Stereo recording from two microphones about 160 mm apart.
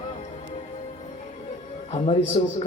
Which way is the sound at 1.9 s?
40° left (ahead or behind).